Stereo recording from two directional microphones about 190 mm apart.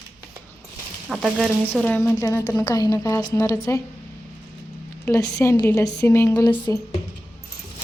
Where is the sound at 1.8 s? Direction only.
10° left (ahead or behind).